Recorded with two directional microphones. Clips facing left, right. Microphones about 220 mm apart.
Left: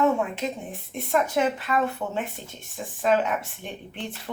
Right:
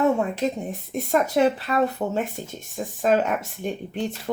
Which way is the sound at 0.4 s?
40° right (ahead or behind).